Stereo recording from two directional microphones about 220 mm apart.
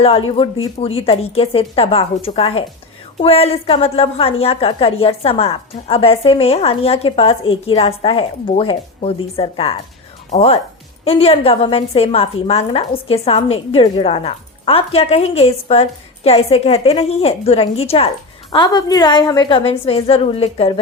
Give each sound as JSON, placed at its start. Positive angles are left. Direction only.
{"t": 0.0, "sound": "a woman's voice", "side_deg": 25}